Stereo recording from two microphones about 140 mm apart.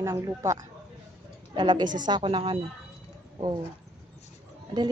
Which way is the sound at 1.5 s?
35° right (ahead or behind).